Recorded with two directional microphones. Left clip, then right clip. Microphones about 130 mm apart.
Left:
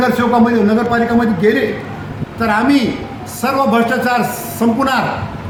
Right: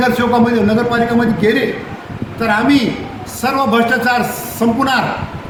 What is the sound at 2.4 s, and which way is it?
A man's voice, 15° left (ahead or behind).